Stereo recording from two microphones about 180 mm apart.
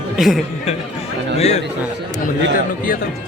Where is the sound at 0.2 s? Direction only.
Centre (ahead or behind).